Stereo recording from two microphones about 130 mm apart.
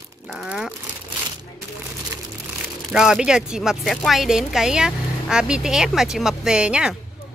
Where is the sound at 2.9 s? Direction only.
5° right (ahead or behind).